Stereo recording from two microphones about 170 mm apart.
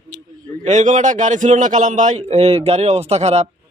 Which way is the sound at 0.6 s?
45° right (ahead or behind).